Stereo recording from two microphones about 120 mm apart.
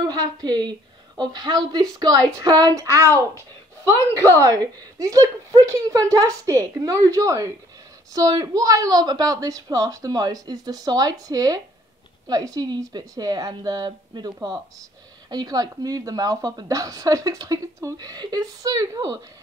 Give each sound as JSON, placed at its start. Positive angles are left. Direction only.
{"t": 0.0, "sound": "a woman's voice", "side_deg": -30}
{"t": 4.4, "sound": "a woman's voice", "side_deg": -30}